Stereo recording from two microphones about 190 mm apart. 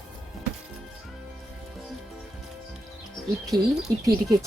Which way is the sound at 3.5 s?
55° right (ahead or behind).